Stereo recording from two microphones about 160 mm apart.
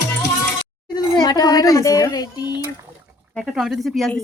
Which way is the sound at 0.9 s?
25° left (ahead or behind).